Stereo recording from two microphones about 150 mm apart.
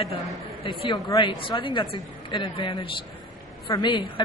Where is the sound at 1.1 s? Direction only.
35° left (ahead or behind).